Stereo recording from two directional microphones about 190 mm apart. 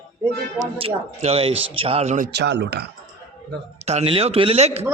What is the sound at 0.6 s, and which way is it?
A man's voice, 30° right (ahead or behind).